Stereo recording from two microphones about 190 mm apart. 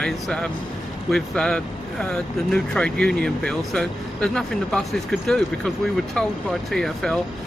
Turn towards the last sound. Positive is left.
turn(degrees=5)  # may be behind; listen again after turning